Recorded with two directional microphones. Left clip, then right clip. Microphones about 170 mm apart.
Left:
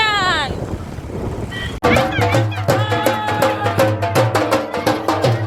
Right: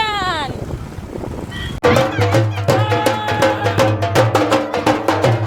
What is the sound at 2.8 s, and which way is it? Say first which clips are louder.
Music: right 2 dB; 70° right (ahead or behind).